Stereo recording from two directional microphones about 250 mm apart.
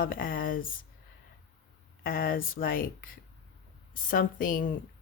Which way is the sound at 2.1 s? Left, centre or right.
Left.